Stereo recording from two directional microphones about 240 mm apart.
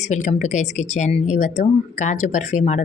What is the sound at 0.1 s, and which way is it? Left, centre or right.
Speech, left.